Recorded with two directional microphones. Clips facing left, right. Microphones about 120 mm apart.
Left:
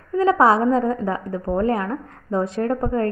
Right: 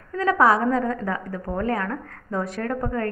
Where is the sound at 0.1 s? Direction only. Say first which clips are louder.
Left 3 dB; 25° left (ahead or behind).